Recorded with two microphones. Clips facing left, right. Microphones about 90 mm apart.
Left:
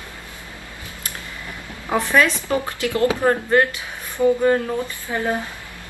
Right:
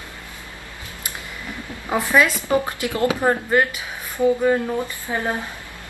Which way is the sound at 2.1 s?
15° right (ahead or behind).